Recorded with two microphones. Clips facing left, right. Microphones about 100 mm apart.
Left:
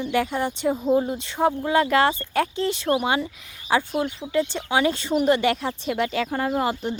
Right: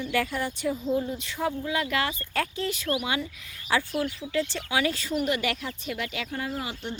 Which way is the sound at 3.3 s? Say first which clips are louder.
Left 5 dB; 20° left (ahead or behind).